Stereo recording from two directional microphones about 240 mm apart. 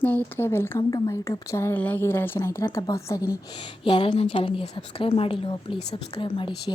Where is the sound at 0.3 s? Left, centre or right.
Centre.